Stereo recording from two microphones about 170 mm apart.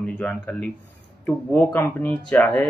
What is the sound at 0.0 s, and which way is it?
Speech, 5° left (ahead or behind).